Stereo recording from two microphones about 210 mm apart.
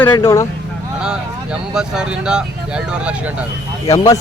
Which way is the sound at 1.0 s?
5° right (ahead or behind).